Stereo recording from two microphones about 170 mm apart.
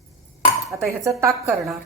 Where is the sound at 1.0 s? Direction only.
20° right (ahead or behind).